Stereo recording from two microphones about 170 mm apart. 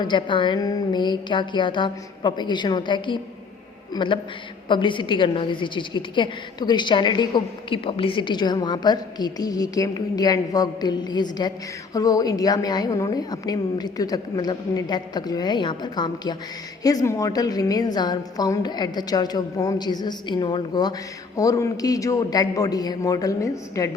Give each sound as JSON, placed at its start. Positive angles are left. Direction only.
{"t": 0.0, "sound": "a woman's voice", "side_deg": 30}